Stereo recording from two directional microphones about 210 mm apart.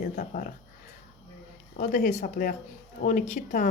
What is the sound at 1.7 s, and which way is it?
Speech, 40° left (ahead or behind).